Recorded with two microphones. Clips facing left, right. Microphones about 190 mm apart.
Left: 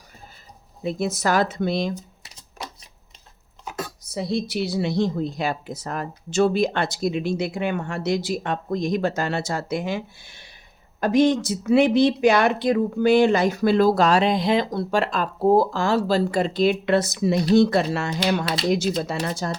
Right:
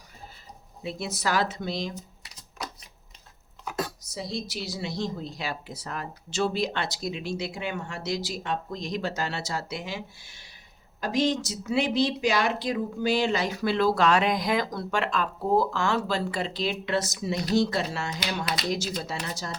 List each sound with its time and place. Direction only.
0.8 s a woman's voice: 45° left (ahead or behind)
4.0 s a woman's voice: 60° left (ahead or behind)